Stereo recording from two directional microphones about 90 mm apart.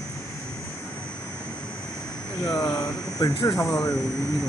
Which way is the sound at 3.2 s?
60° left (ahead or behind).